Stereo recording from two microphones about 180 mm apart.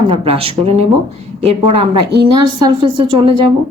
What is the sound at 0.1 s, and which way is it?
Speech, 30° right (ahead or behind).